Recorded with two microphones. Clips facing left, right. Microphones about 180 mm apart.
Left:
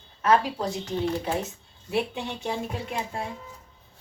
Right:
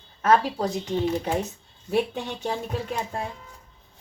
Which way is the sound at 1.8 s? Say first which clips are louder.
Right 3 dB; 40° right (ahead or behind).